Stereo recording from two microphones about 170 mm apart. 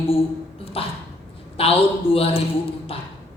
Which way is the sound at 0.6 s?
35° left (ahead or behind).